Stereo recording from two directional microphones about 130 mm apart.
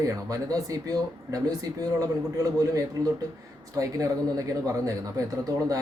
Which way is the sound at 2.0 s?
25° right (ahead or behind).